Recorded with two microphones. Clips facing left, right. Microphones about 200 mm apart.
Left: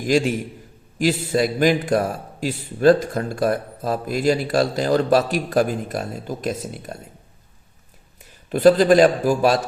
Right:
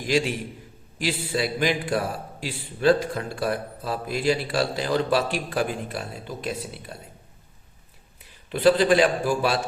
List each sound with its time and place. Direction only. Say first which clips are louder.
0.1 s a man's voice: left 5 dB; 45° left (ahead or behind)
8.2 s a man's voice: left 6 dB; 45° left (ahead or behind)